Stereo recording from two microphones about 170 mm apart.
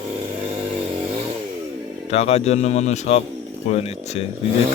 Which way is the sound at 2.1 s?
40° left (ahead or behind).